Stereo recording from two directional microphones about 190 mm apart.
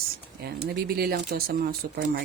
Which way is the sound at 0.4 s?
55° right (ahead or behind).